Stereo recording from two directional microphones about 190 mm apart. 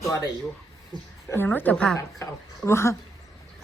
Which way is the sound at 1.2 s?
10° left (ahead or behind).